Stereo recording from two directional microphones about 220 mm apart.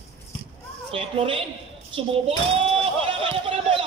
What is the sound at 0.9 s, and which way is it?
Speech, 25° right (ahead or behind).